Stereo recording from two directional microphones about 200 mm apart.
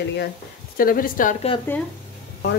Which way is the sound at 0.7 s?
45° left (ahead or behind).